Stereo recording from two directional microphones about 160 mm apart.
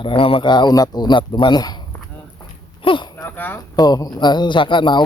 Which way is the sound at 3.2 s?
10° left (ahead or behind).